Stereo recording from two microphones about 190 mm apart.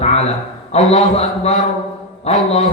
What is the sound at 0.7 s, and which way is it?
A man's voice, 35° left (ahead or behind).